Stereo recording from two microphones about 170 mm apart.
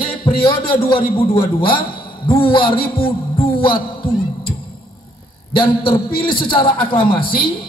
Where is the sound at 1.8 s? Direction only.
60° left (ahead or behind).